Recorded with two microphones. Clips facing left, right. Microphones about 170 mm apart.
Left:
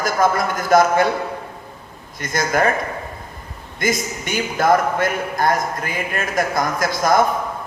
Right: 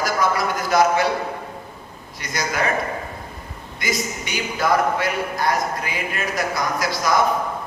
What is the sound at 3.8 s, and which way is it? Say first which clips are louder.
A man's voice: left 4 dB; 50° left (ahead or behind).